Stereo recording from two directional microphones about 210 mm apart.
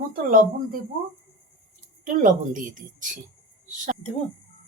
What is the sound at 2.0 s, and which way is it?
Speech, 40° right (ahead or behind).